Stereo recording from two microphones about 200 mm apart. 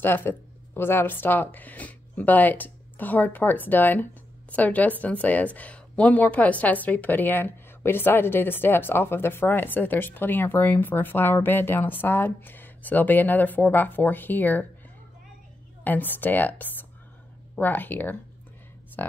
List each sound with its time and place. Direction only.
0.0 s speech: 10° left (ahead or behind)
15.8 s speech: 10° left (ahead or behind)